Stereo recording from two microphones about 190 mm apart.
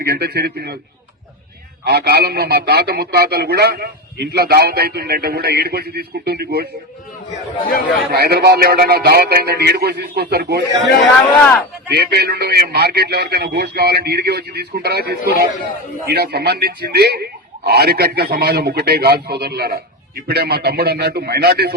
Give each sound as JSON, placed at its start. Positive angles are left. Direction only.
{"t": 0.0, "sound": "a man's voice", "side_deg": -60}
{"t": 1.8, "sound": "a man's voice", "side_deg": -55}
{"t": 8.1, "sound": "a man's voice", "side_deg": -60}
{"t": 11.9, "sound": "a man's voice", "side_deg": -60}